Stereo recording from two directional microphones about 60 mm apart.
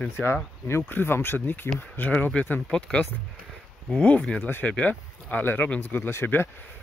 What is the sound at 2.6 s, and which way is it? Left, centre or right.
Speech, centre.